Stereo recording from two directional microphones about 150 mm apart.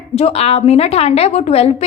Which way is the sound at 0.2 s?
45° left (ahead or behind).